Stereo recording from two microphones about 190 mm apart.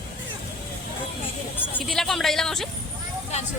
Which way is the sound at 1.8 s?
Centre (ahead or behind).